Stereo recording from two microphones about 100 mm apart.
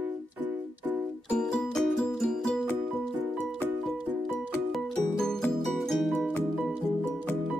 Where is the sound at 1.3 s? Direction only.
10° left (ahead or behind).